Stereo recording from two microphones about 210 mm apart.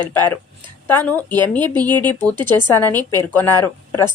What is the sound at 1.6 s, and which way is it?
Speech, 20° right (ahead or behind).